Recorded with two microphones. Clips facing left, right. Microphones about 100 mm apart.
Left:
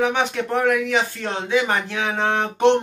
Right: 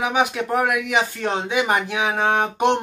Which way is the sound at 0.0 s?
10° right (ahead or behind).